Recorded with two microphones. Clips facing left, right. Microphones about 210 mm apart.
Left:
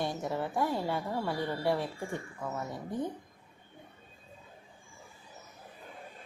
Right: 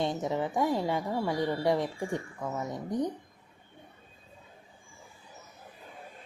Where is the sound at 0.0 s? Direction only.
20° right (ahead or behind).